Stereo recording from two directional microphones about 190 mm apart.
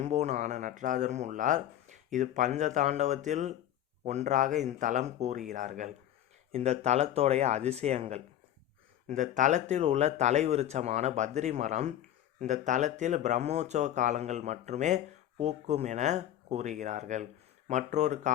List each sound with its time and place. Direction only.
0.0 s speech: 35° right (ahead or behind)